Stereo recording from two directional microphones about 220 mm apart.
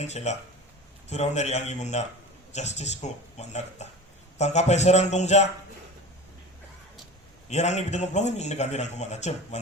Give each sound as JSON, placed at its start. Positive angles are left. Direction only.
{"t": 0.0, "sound": "a man's voice", "side_deg": 30}
{"t": 7.5, "sound": "a man's voice", "side_deg": 30}